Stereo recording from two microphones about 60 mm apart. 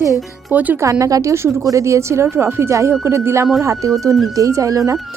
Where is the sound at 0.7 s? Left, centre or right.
Right.